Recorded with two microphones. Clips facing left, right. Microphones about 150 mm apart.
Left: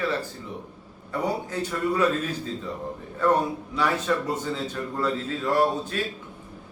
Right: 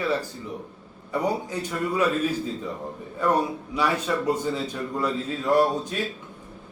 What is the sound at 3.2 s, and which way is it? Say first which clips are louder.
A man's voice: left 1 dB; 10° right (ahead or behind).